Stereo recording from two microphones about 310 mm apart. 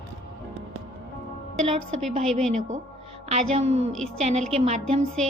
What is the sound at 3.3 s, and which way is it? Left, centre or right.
Speech, right.